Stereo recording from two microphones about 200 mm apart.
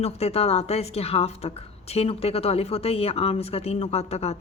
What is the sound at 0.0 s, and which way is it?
A woman's voice, 30° left (ahead or behind).